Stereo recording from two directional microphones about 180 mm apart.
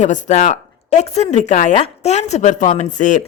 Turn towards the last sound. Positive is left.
turn(degrees=45)  # may be behind; listen again after turning